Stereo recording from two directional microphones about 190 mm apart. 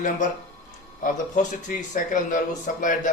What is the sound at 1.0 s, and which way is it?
Speech, 45° left (ahead or behind).